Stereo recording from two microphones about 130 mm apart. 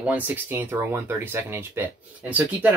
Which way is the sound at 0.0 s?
10° right (ahead or behind).